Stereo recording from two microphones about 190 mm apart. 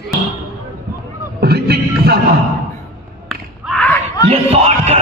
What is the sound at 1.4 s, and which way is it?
Music, 55° right (ahead or behind).